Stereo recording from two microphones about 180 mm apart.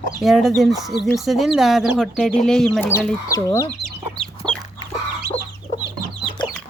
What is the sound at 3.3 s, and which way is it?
Speech, 15° left (ahead or behind).